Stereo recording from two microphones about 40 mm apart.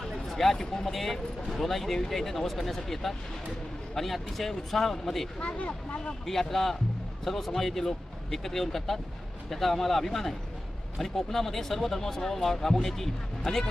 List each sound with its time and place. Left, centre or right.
0.0 s speech: centre
5.4 s speech: left
6.5 s speech: centre